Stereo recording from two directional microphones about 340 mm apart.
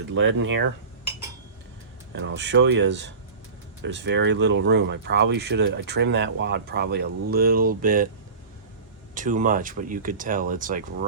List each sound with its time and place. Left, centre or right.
0.1 s speech: right
2.1 s speech: right
9.1 s speech: right